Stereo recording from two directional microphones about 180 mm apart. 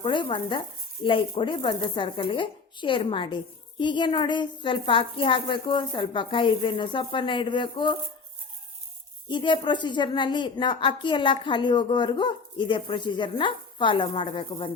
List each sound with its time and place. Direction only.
0.0 s a woman's voice: 25° left (ahead or behind)
9.3 s a woman's voice: 25° left (ahead or behind)